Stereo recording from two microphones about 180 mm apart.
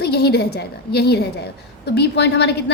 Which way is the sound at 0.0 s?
65° left (ahead or behind).